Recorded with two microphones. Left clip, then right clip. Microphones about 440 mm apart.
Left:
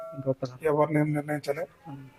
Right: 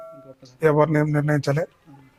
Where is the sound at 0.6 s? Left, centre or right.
Right.